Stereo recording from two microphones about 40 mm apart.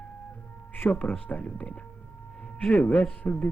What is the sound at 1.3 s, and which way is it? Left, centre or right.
Speech, left.